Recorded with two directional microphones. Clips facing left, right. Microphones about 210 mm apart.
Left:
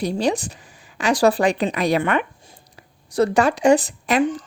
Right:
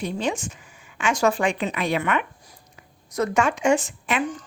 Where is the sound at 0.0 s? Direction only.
35° left (ahead or behind).